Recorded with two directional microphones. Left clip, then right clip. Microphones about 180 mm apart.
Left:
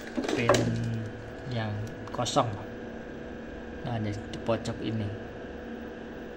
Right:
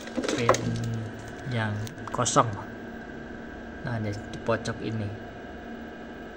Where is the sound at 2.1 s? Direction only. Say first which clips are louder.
Right 4 dB; 20° right (ahead or behind).